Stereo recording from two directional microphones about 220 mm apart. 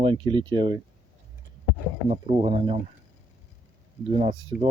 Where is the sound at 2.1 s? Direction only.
25° right (ahead or behind).